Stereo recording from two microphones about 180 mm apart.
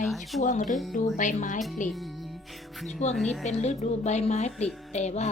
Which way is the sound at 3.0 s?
40° left (ahead or behind).